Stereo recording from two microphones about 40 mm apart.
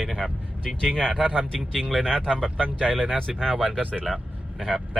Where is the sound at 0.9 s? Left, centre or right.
Centre.